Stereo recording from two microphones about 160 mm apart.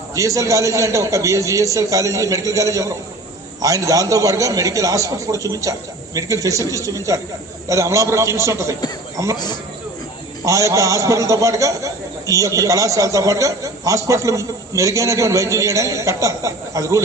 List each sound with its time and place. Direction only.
0.1 s a man's voice: 20° right (ahead or behind)
9.3 s speech: 25° left (ahead or behind)
10.4 s a man's voice: 20° right (ahead or behind)